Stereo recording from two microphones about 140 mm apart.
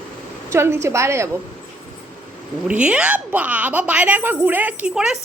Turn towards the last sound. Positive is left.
turn(degrees=-5)  # may be behind; listen again after turning